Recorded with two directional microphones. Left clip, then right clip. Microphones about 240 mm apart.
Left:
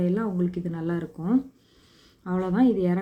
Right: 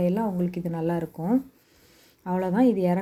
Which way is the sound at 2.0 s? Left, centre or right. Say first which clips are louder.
Right 2 dB; centre.